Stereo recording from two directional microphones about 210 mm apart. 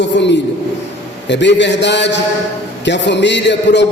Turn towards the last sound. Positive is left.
turn(degrees=55)  # may be behind; listen again after turning